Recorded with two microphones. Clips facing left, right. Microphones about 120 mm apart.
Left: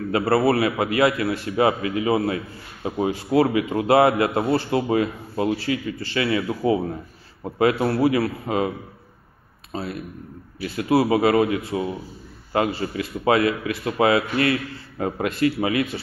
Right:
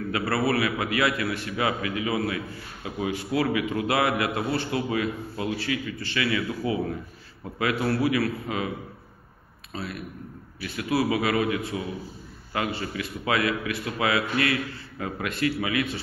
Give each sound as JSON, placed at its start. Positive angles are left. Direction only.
{"t": 0.1, "sound": "a man's voice", "side_deg": 35}